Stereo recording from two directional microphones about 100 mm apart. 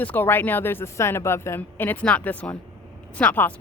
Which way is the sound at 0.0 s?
20° left (ahead or behind).